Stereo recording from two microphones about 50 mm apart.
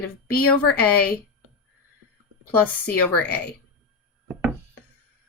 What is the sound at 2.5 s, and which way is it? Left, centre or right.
Speech, left.